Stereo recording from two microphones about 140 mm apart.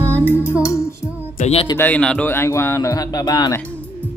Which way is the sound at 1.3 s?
50° left (ahead or behind).